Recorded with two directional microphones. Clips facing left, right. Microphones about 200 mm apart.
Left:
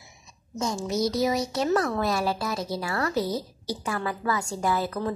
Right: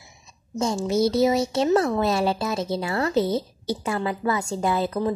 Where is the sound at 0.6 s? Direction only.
30° right (ahead or behind).